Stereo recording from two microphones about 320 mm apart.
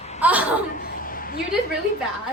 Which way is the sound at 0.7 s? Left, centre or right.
Left.